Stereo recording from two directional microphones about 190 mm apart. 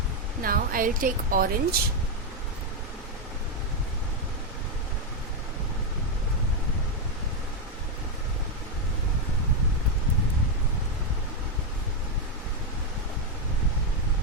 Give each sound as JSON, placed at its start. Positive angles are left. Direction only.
{"t": 0.4, "sound": "speech", "side_deg": -50}